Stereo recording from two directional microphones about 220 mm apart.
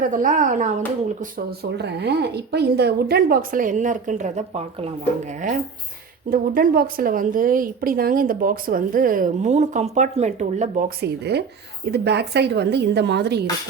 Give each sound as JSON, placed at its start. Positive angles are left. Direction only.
{"t": 0.0, "sound": "a woman's voice", "side_deg": -35}
{"t": 1.2, "sound": "a woman's voice", "side_deg": -45}
{"t": 6.3, "sound": "a woman's voice", "side_deg": -40}